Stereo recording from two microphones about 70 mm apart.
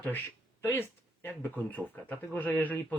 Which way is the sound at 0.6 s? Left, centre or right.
Left.